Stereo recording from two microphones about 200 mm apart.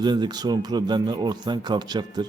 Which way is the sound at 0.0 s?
20° right (ahead or behind).